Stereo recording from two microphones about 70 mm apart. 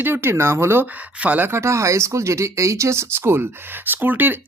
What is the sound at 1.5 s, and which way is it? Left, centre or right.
Speech, right.